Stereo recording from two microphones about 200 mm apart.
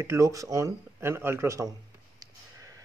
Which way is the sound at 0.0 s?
15° right (ahead or behind).